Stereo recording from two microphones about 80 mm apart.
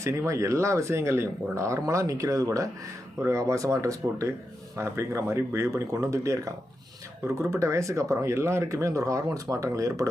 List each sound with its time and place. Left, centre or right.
0.0 s speech: right
7.5 s speech: right